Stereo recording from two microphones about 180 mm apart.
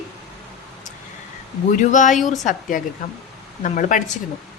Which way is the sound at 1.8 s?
45° left (ahead or behind).